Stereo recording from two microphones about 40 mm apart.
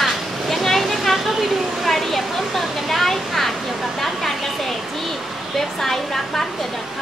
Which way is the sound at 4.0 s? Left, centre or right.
Centre.